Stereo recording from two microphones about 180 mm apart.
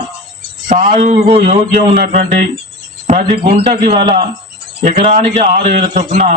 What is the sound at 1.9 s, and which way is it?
Speech, 50° right (ahead or behind).